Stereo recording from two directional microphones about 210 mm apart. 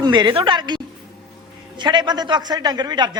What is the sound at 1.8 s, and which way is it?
A woman's voice, 20° right (ahead or behind).